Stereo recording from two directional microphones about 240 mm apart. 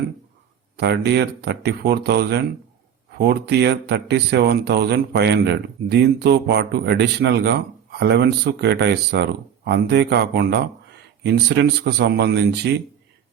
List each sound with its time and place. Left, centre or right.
0.8 s a man's voice: right